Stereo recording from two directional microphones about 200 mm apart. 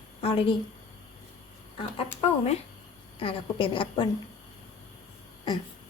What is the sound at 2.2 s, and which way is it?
A woman's voice, 30° left (ahead or behind).